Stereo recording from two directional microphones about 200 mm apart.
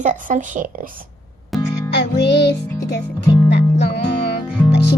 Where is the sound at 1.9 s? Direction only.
55° left (ahead or behind).